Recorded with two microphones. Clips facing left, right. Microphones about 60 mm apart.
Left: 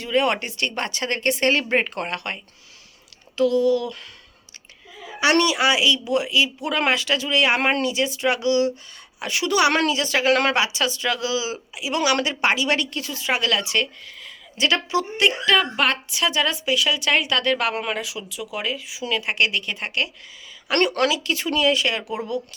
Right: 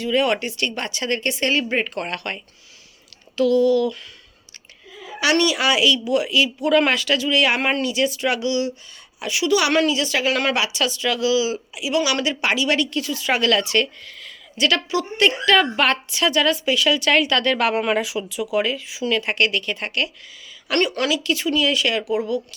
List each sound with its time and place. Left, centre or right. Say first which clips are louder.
0.0 s speech: right 1 dB; left
2.0 s speech: right 1 dB; left
5.2 s speech: even; left
7.9 s speech: right 1 dB; left
9.6 s speech: left 2 dB; left
10.6 s speech: even; left
13.3 s a woman's voice: right 3 dB; centre
15.2 s a woman's voice: right 3 dB; centre
17.7 s speech: right 6 dB; centre
18.5 s a woman's voice: right 6 dB; centre
20.7 s speech: left 1 dB; left
21.1 s speech: right 3 dB; left